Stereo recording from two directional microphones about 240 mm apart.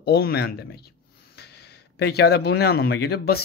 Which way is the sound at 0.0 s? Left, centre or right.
Left.